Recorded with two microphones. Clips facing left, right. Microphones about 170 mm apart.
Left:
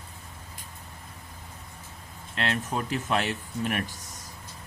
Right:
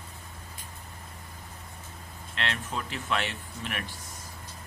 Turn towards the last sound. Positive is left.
turn(degrees=40)  # may be behind; listen again after turning